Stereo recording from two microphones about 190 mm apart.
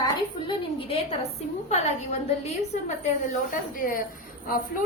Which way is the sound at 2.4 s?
35° left (ahead or behind).